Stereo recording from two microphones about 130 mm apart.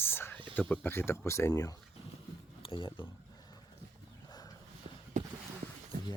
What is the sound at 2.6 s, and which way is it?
Speech, 40° left (ahead or behind).